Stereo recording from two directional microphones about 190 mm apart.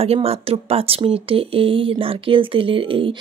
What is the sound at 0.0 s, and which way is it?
Speech, 30° right (ahead or behind).